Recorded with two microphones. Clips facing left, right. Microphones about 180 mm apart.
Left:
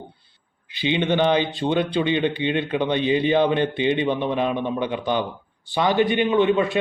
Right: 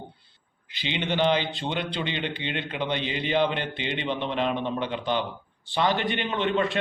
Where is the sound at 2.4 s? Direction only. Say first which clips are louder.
Left 8 dB; 15° left (ahead or behind).